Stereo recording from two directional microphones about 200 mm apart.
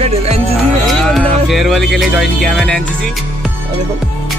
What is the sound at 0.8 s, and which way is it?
Speech, centre (ahead or behind).